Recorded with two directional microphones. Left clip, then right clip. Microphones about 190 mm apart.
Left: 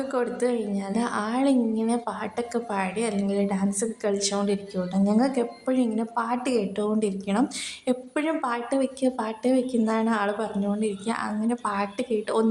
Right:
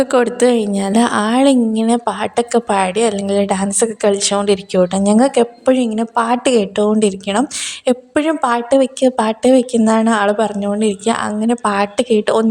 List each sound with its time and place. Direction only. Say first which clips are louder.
0.0 s a woman's voice: right 13 dB; 45° right (ahead or behind)